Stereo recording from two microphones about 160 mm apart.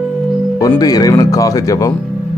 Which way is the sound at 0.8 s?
25° left (ahead or behind).